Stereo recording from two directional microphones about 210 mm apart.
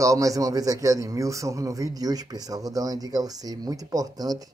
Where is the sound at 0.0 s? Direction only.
15° right (ahead or behind).